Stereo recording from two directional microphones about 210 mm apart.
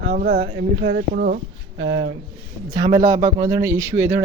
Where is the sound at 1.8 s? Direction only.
60° right (ahead or behind).